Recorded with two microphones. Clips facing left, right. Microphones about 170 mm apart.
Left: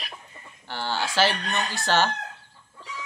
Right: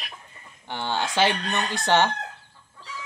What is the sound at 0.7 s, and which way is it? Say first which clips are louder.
Speech: right 1 dB; 20° right (ahead or behind).